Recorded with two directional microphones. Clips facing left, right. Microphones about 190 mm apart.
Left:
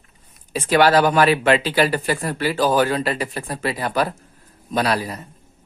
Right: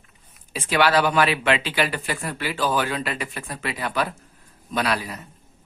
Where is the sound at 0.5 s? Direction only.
40° left (ahead or behind).